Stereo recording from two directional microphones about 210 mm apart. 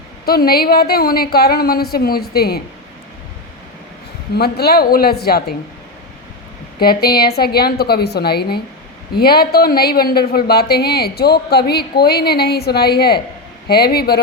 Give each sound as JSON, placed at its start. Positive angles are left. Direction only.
{"t": 0.3, "sound": "speech", "side_deg": 45}
{"t": 4.4, "sound": "speech", "side_deg": 50}
{"t": 6.7, "sound": "speech", "side_deg": 45}